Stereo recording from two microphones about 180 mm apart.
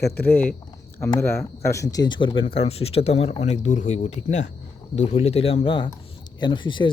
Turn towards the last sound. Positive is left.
turn(degrees=25)  # may be behind; listen again after turning